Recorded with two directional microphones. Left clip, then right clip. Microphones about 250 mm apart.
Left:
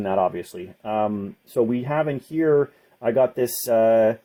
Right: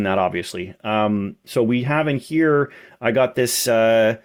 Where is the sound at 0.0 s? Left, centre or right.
Right.